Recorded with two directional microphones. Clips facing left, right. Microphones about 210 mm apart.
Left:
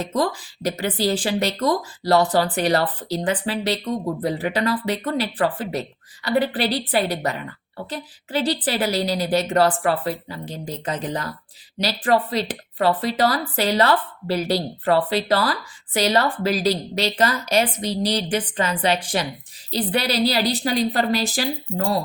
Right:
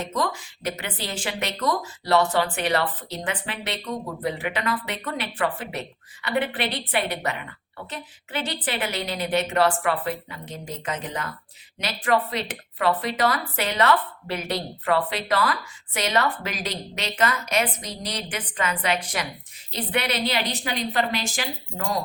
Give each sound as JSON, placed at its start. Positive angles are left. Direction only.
{"t": 0.0, "sound": "speech", "side_deg": 35}